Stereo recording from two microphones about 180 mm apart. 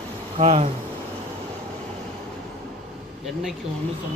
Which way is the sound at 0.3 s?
35° right (ahead or behind).